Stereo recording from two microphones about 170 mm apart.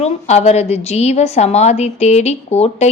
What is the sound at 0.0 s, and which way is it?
A woman's voice, 40° left (ahead or behind).